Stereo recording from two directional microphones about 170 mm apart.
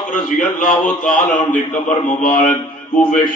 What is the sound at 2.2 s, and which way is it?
Speech, 50° left (ahead or behind).